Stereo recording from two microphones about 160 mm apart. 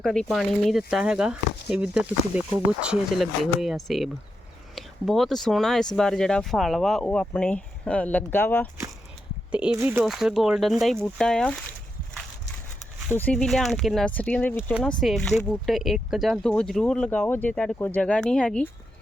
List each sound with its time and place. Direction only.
0.0 s speech: centre (ahead or behind)
9.5 s speech: 5° right (ahead or behind)
13.1 s speech: 10° left (ahead or behind)